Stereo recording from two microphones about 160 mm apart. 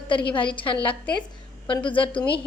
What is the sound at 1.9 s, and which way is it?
Speech, 30° left (ahead or behind).